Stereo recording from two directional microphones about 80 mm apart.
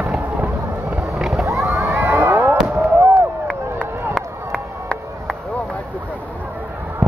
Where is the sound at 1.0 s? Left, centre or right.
Centre.